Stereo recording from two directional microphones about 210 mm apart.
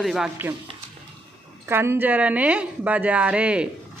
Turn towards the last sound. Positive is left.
turn(degrees=-5)  # may be behind; listen again after turning